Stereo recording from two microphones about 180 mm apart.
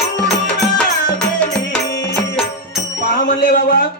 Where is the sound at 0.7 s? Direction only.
5° left (ahead or behind).